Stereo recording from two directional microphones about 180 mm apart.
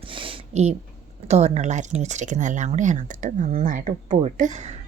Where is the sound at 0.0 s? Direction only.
30° right (ahead or behind).